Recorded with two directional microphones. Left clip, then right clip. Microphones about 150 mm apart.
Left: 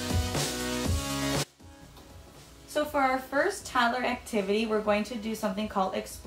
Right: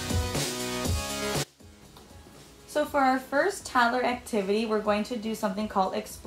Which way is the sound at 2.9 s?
15° right (ahead or behind).